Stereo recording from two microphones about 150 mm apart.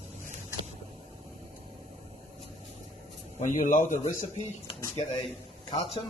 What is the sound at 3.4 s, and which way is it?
A man's voice, 50° left (ahead or behind).